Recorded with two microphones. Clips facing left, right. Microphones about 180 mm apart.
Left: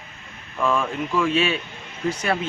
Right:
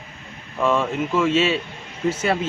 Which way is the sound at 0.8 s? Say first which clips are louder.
Right 2 dB; 5° right (ahead or behind).